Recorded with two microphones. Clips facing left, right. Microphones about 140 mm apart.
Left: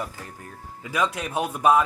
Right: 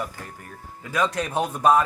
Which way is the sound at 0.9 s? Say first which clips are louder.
Right 2 dB; 5° left (ahead or behind).